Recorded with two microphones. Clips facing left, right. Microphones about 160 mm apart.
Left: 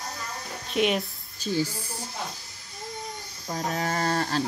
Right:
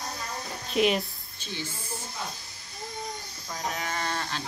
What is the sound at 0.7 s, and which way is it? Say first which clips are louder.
Speech: even; centre (ahead or behind).